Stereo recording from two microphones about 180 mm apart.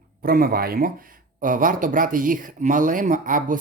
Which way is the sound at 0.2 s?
55° right (ahead or behind).